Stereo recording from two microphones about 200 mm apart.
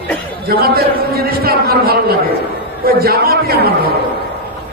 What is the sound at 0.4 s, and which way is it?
A man's voice, 50° right (ahead or behind).